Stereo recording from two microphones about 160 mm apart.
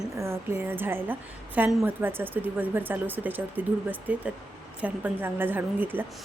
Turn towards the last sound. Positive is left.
turn(degrees=-10)  # may be behind; listen again after turning